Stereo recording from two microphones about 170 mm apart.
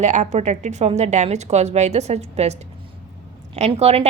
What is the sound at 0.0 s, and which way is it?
A woman's voice, 45° right (ahead or behind).